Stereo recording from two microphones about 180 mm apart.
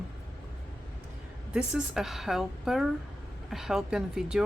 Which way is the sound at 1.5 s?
Centre (ahead or behind).